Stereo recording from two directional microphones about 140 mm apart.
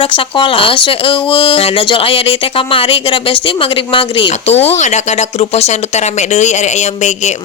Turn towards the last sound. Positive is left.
turn(degrees=55)  # may be behind; listen again after turning